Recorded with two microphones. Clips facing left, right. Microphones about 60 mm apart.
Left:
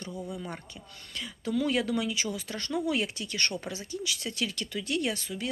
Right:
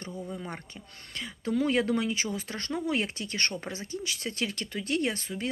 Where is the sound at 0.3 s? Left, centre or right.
Right.